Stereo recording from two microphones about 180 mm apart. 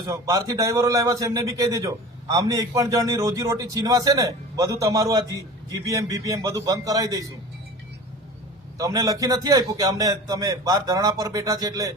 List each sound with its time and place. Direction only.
0.0 s a man's voice: 20° right (ahead or behind)
8.8 s a man's voice: 20° right (ahead or behind)